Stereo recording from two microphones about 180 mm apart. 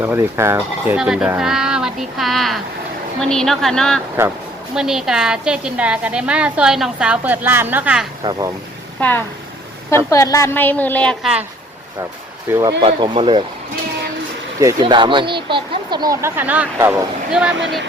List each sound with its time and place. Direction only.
0.0 s a woman's voice: 10° right (ahead or behind)
8.2 s speech: 20° right (ahead or behind)
9.0 s a woman's voice: 10° left (ahead or behind)
12.5 s speech: 15° right (ahead or behind)
12.8 s speech: 30° right (ahead or behind)
14.6 s speech: 20° right (ahead or behind)
17.4 s a woman's voice: 5° right (ahead or behind)